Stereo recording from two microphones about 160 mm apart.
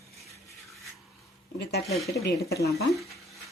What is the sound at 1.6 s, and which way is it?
Speech, 90° left.